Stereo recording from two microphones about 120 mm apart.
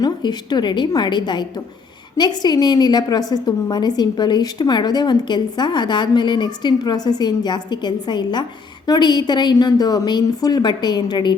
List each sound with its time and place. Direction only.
0.0 s a woman's voice: 35° left (ahead or behind)